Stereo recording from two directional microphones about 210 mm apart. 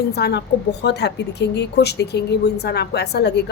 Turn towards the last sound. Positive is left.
turn(degrees=55)  # may be behind; listen again after turning